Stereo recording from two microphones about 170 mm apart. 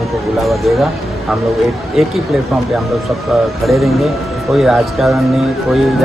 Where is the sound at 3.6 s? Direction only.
Centre (ahead or behind).